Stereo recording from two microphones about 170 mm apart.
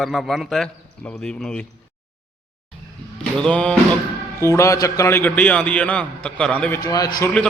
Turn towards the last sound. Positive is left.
turn(degrees=20)  # may be behind; listen again after turning